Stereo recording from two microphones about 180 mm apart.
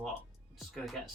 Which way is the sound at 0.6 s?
Centre (ahead or behind).